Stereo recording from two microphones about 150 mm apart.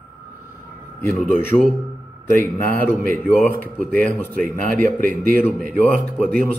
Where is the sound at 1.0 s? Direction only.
15° left (ahead or behind).